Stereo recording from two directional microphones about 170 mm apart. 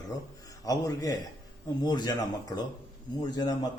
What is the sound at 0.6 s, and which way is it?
A man's voice, 20° left (ahead or behind).